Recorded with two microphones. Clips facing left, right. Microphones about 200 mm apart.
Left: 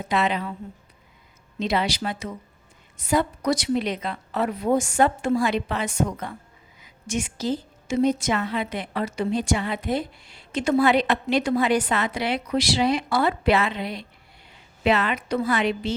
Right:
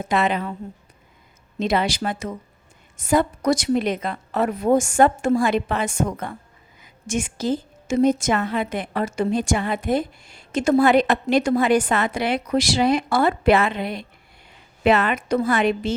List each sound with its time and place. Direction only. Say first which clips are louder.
0.0 s a woman's voice: right 3 dB; 50° right (ahead or behind)
1.5 s a woman's voice: right 3 dB; 50° right (ahead or behind)